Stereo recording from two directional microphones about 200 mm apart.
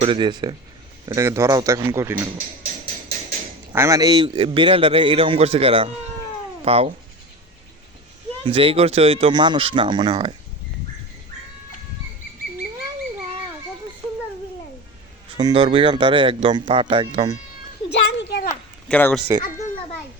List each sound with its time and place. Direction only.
0.0 s a man's voice: 25° right (ahead or behind)
3.7 s a man's voice: 15° right (ahead or behind); by 6.9 s 30° right (ahead or behind)
8.4 s a man's voice: 30° right (ahead or behind)
15.4 s a man's voice: 25° right (ahead or behind)
17.9 s a sound: 60° left (ahead or behind)
18.4 s a sound: 10° left (ahead or behind)